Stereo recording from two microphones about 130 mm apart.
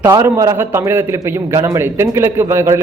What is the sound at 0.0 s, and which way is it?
A man's voice, 25° right (ahead or behind).